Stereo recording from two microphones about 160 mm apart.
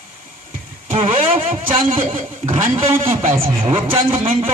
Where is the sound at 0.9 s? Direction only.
40° right (ahead or behind).